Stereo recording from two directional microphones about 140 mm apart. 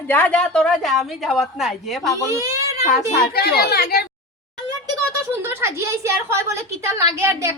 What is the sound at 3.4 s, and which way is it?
Speech, 90° left.